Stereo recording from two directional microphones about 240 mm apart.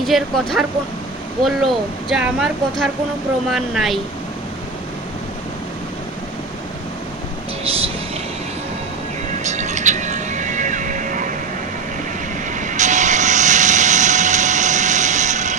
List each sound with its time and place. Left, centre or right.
0.0 s speech: centre
7.6 s a sound: right
9.4 s music: right
12.5 s vehicle: right